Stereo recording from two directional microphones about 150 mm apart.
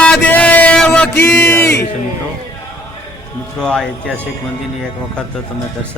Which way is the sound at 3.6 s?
5° left (ahead or behind).